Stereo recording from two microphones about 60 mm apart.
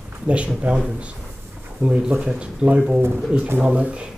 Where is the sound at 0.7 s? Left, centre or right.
Centre.